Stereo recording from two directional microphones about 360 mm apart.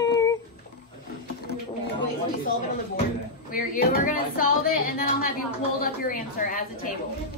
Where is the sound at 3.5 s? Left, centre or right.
Left.